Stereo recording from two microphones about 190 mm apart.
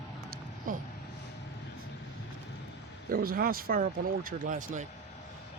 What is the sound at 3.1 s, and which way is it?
Speech, 50° right (ahead or behind).